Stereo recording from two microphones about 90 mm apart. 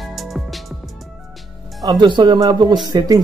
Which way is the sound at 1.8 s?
50° right (ahead or behind).